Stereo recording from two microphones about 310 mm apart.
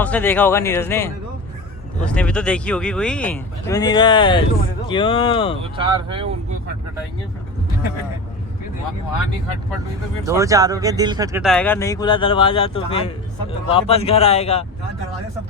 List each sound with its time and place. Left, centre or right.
0.0 s speech: centre
5.7 s speech: centre
10.2 s speech: centre